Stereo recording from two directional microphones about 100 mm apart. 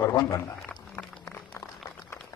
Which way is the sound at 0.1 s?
35° left (ahead or behind).